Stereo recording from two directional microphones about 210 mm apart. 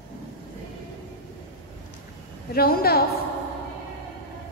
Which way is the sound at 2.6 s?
45° left (ahead or behind).